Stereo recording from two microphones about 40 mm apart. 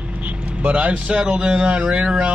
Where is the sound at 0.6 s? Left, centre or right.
Right.